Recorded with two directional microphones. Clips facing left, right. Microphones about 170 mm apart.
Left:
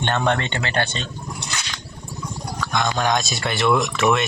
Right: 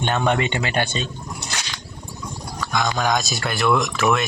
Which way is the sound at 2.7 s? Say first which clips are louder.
Even; centre (ahead or behind).